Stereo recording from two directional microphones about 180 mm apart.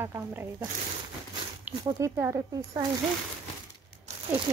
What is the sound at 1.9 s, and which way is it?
Speech, 15° right (ahead or behind).